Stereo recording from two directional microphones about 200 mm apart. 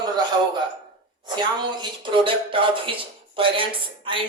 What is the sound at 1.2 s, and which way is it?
Speech, 20° right (ahead or behind).